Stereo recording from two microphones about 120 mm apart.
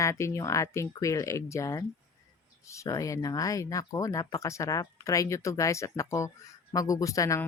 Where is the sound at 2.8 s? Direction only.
30° left (ahead or behind).